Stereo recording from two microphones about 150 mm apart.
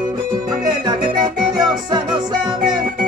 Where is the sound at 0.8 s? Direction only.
30° right (ahead or behind).